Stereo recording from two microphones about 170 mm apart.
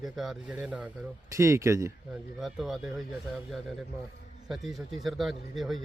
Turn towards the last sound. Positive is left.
turn(degrees=0)  # may be behind; listen again after turning